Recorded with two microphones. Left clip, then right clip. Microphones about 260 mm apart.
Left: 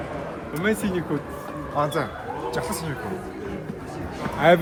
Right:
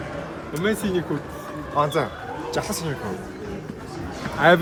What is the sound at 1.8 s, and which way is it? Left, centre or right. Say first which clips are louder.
Speech: right 3 dB; centre.